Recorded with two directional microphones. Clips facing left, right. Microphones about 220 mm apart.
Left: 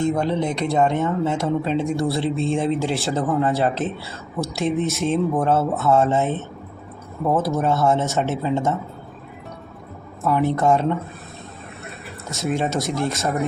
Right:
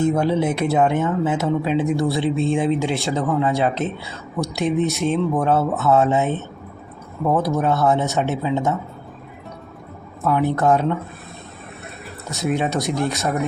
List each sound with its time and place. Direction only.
0.0 s speech: 5° right (ahead or behind)
10.2 s speech: centre (ahead or behind)
12.3 s speech: centre (ahead or behind)